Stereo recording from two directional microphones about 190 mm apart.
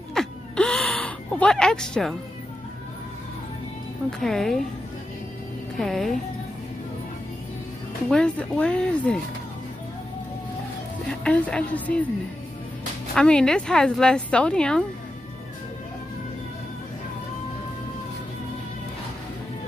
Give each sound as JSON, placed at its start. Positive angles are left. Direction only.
{"t": 0.1, "sound": "gasp", "side_deg": 5}
{"t": 4.2, "sound": "speech", "side_deg": 0}
{"t": 5.8, "sound": "speech", "side_deg": 0}
{"t": 8.1, "sound": "speech", "side_deg": 5}
{"t": 11.2, "sound": "a woman's voice", "side_deg": 5}
{"t": 13.1, "sound": "speech", "side_deg": 5}